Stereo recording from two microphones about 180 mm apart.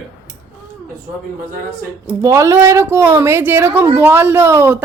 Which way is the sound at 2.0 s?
15° right (ahead or behind).